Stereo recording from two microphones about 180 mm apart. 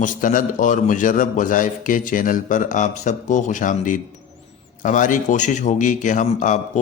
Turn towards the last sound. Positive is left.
turn(degrees=45)  # may be behind; listen again after turning